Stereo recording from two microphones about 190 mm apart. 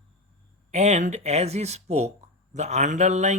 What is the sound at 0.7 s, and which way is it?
Mantra, 35° right (ahead or behind).